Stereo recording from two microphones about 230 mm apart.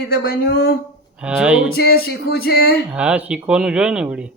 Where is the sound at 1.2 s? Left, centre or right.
Centre.